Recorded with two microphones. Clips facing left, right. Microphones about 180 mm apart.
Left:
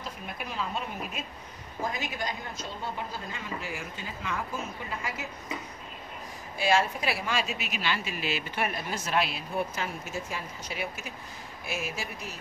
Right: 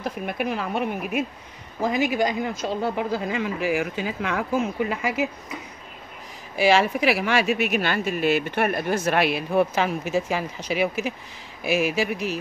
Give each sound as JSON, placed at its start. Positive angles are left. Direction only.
{"t": 0.0, "sound": "speech", "side_deg": -70}
{"t": 1.8, "sound": "speech", "side_deg": -85}
{"t": 6.5, "sound": "speech", "side_deg": -90}